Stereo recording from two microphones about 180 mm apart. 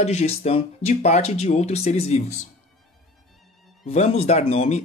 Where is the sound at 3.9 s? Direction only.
35° left (ahead or behind).